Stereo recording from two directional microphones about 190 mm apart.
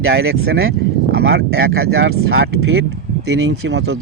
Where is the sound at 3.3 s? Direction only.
70° right (ahead or behind).